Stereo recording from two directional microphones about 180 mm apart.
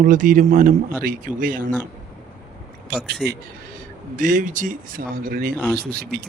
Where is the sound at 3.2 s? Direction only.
Centre (ahead or behind).